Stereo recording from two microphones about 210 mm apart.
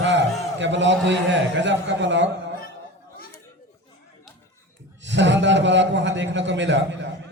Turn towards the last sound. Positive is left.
turn(degrees=-60)  # may be behind; listen again after turning